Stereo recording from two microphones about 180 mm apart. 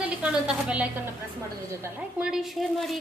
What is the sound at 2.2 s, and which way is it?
Speech, 5° right (ahead or behind).